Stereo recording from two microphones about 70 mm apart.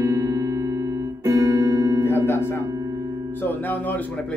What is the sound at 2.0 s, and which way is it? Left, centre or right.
Music, left.